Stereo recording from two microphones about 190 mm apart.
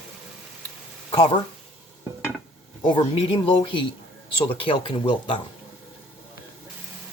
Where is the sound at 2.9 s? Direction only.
30° left (ahead or behind).